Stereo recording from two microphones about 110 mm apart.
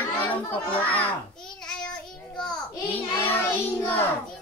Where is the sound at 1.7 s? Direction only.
5° left (ahead or behind).